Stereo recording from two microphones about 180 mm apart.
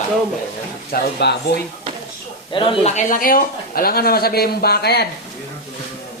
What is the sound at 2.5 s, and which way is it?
Speech, 30° left (ahead or behind).